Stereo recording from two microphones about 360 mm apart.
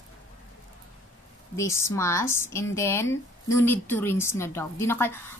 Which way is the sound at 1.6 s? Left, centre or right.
Centre.